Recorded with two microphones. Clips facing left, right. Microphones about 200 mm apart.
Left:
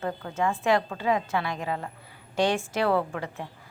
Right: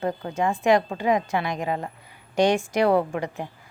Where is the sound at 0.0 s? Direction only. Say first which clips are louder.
Right 3 dB; 20° right (ahead or behind).